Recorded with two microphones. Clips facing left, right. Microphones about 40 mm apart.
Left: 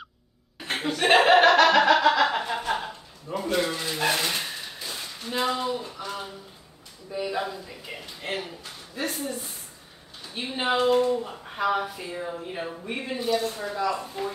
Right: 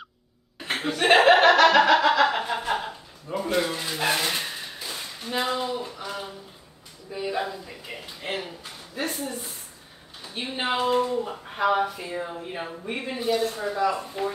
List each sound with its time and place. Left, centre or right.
0.6 s chuckle: centre
3.4 s speech: centre
13.7 s speech: centre